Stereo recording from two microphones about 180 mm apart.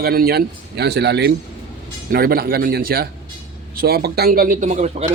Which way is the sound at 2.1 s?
55° right (ahead or behind).